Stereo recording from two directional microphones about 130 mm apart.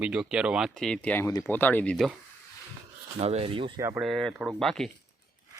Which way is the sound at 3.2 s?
50° right (ahead or behind).